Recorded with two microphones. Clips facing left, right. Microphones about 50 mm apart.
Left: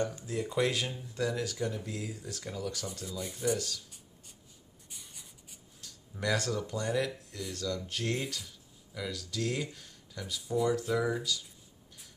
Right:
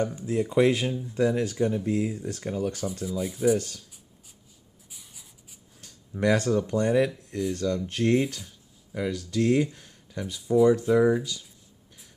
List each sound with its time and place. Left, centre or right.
0.3 s speech: right
2.9 s speech: centre
3.5 s speech: right
4.8 s writing: centre
5.8 s a sound: right
6.7 s speech: right
9.8 s a sound: right
10.7 s speech: right